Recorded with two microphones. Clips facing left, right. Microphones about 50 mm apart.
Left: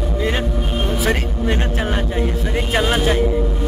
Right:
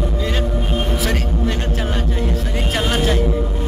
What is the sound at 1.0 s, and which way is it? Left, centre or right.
A man's voice, left.